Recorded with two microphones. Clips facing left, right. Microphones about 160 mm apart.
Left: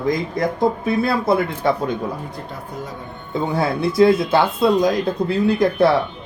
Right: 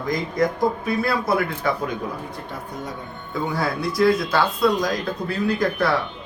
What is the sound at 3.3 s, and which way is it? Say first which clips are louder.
Speech: left 4 dB; 25° left (ahead or behind).